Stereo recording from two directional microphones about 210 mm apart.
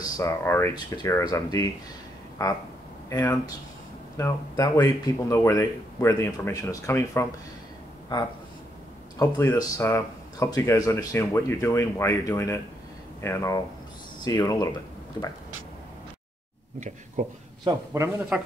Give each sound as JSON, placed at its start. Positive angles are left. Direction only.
{"t": 0.0, "sound": "speech", "side_deg": 15}
{"t": 9.2, "sound": "speech", "side_deg": 15}
{"t": 17.2, "sound": "speech", "side_deg": -35}
{"t": 17.6, "sound": "a man's voice", "side_deg": -15}